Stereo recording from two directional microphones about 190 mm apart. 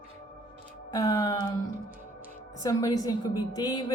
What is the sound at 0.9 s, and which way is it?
Speech, 20° left (ahead or behind).